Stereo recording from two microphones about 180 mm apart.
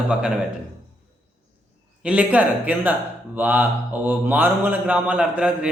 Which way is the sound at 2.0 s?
10° right (ahead or behind).